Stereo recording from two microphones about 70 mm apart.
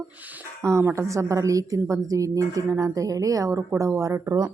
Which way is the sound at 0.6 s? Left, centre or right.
Right.